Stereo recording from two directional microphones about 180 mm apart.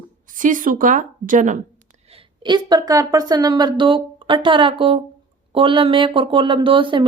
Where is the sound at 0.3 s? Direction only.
45° right (ahead or behind).